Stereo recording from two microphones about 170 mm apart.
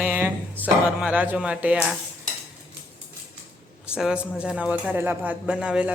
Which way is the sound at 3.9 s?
5° right (ahead or behind).